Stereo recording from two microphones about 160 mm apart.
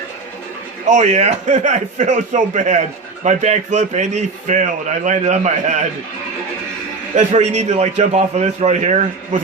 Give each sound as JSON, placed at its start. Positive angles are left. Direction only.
{"t": 0.9, "sound": "a man's voice", "side_deg": -45}
{"t": 7.2, "sound": "a man's voice", "side_deg": -45}